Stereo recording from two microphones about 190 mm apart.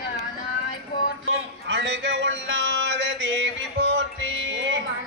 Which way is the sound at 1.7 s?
70° right (ahead or behind).